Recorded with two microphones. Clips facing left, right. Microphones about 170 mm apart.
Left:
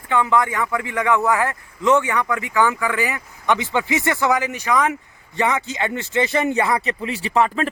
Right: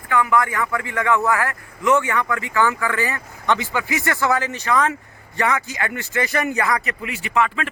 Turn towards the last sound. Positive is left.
turn(degrees=35)  # may be behind; listen again after turning